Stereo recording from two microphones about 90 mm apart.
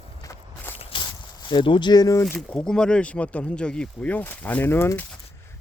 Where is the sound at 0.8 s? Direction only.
90° left.